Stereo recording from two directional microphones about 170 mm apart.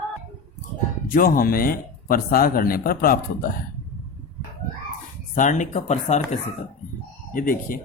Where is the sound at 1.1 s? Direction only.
55° left (ahead or behind).